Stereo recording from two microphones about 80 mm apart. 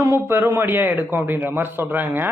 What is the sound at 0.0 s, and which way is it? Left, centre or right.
A man's voice, right.